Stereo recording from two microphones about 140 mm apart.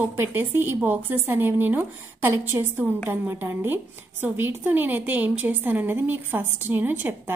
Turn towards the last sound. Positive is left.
turn(degrees=-15)  # may be behind; listen again after turning